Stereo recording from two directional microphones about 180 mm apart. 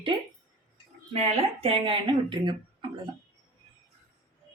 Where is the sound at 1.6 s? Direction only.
30° right (ahead or behind).